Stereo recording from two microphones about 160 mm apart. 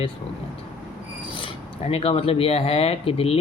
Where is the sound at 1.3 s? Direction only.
30° left (ahead or behind).